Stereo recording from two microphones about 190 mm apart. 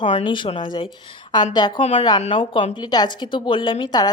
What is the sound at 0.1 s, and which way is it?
A woman's voice, 25° left (ahead or behind).